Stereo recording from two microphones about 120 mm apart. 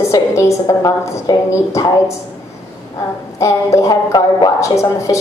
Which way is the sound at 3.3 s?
25° left (ahead or behind).